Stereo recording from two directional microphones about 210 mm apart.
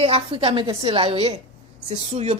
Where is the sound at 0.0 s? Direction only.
25° right (ahead or behind).